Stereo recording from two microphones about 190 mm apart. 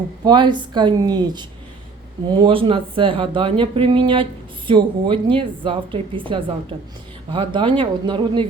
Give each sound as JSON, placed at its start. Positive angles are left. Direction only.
{"t": 0.3, "sound": "speech", "side_deg": -25}